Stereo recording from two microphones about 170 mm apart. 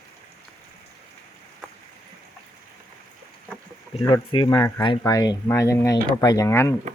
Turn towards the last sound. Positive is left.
turn(degrees=15)  # may be behind; listen again after turning